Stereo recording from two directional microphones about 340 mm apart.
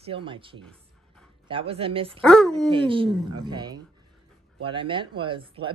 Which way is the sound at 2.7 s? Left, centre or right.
Centre.